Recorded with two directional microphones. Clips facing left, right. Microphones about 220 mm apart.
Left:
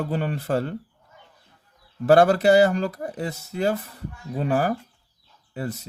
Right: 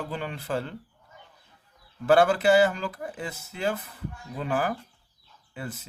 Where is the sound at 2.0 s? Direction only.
40° left (ahead or behind).